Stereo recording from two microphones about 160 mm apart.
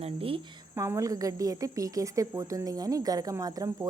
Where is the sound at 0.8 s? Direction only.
20° right (ahead or behind).